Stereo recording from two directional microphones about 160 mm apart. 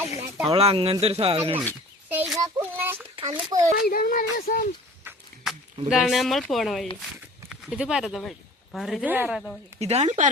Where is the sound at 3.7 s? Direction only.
65° left (ahead or behind).